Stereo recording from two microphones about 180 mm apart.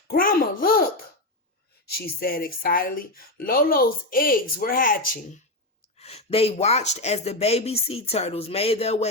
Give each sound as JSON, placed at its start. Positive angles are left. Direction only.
{"t": 0.1, "sound": "speech", "side_deg": 50}
{"t": 1.9, "sound": "speech", "side_deg": 60}
{"t": 6.0, "sound": "speech", "side_deg": 35}